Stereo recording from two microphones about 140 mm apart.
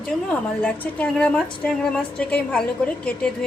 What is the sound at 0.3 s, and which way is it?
A woman's voice, 5° left (ahead or behind).